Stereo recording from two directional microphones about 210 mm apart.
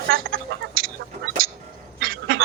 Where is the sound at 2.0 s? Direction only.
65° right (ahead or behind).